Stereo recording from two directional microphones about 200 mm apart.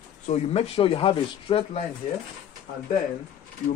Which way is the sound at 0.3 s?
35° left (ahead or behind).